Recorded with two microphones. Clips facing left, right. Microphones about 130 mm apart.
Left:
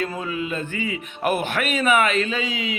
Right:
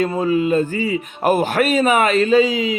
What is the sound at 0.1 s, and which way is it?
A man's voice, 35° right (ahead or behind).